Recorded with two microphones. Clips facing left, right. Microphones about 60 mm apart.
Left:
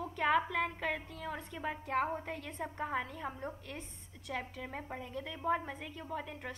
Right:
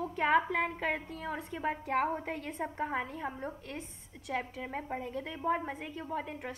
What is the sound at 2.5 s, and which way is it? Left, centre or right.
A woman's voice, centre.